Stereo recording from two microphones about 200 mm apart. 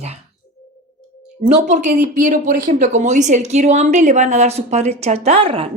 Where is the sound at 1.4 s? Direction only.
35° right (ahead or behind).